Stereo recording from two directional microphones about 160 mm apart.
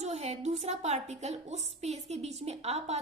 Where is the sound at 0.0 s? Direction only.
45° right (ahead or behind).